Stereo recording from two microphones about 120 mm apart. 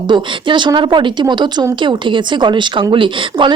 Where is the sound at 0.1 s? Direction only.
40° right (ahead or behind).